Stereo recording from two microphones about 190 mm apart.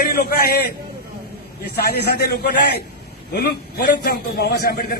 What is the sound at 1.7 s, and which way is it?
A man's voice, 60° left (ahead or behind).